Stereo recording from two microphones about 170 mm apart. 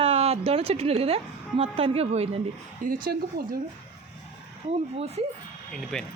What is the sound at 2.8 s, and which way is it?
Speech, 50° right (ahead or behind).